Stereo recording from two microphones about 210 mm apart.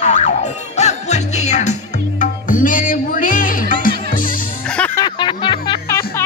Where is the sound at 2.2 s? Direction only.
40° left (ahead or behind).